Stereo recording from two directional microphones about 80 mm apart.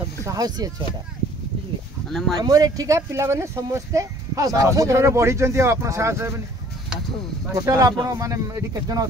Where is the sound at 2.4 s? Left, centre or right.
Right.